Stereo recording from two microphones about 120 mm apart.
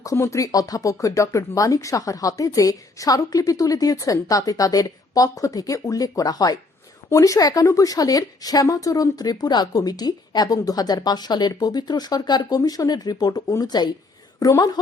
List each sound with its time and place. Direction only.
0.0 s a woman's voice: 25° left (ahead or behind)